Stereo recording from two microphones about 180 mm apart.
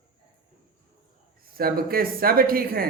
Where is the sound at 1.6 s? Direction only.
55° right (ahead or behind).